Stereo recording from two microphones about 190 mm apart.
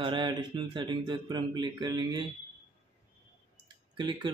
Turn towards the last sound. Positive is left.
turn(degrees=-25)  # may be behind; listen again after turning